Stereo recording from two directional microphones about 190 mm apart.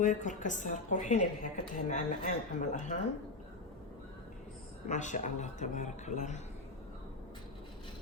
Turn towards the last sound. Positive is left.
turn(degrees=40)  # may be behind; listen again after turning